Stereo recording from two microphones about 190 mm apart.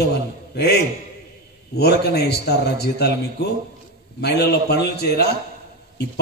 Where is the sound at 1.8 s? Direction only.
60° left (ahead or behind).